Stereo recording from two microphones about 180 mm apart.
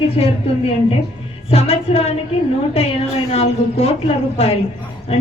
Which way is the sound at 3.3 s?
35° left (ahead or behind).